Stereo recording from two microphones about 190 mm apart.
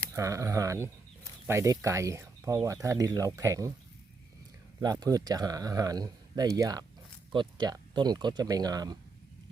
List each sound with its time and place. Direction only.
0.2 s speech: 15° right (ahead or behind)
4.8 s speech: 20° right (ahead or behind)